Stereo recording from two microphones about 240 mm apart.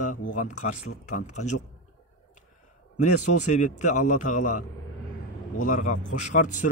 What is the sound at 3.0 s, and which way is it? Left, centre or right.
Speech, left.